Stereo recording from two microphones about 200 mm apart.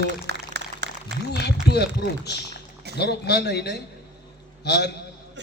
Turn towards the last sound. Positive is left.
turn(degrees=55)  # may be behind; listen again after turning